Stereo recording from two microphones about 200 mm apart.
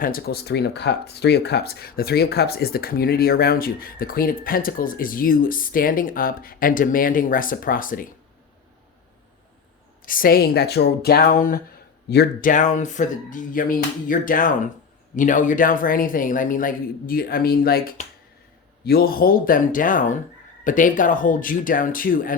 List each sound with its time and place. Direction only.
0.0 s speech: 50° left (ahead or behind)
10.1 s speech: 45° left (ahead or behind)
12.0 s speech: 55° left (ahead or behind)